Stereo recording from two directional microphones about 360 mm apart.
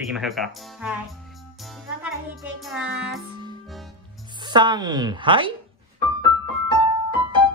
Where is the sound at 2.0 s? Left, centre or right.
Centre.